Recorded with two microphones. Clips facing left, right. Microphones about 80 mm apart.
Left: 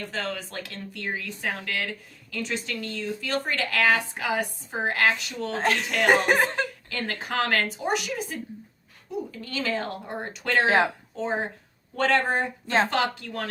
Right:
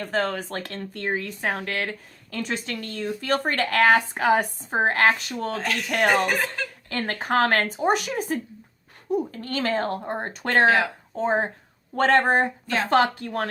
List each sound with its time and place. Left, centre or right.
0.0 s speech: right
3.2 s speech: right
5.5 s speech: left
6.9 s speech: right
10.7 s speech: left
11.1 s speech: right
12.6 s a woman's voice: left
12.9 s speech: right